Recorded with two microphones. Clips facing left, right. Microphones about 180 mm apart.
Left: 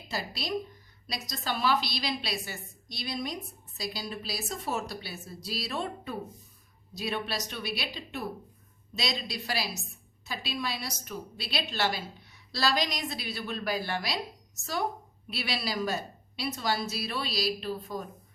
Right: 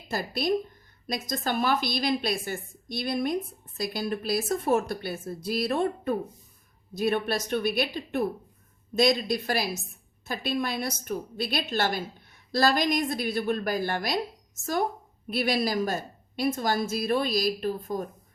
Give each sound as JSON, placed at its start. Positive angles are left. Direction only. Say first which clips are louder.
{"t": 0.1, "sound": "a woman's voice", "louder": "right 7 dB", "side_deg": -50}
{"t": 15.3, "sound": "a woman's voice", "louder": "right 8 dB", "side_deg": -50}